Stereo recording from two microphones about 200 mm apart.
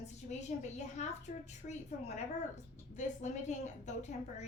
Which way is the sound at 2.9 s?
35° left (ahead or behind).